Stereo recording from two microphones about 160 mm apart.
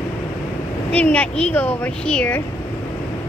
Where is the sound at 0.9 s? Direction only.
10° left (ahead or behind).